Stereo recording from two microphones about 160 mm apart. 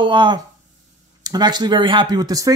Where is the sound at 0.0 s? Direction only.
30° right (ahead or behind).